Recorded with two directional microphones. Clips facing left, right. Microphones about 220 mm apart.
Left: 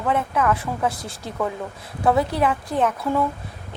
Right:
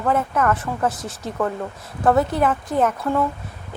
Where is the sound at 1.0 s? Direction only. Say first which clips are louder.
Right 3 dB; 35° left (ahead or behind).